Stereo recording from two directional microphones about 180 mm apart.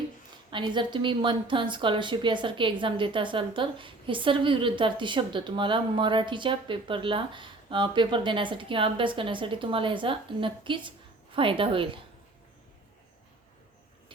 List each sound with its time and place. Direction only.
0.5 s a woman's voice: 25° right (ahead or behind)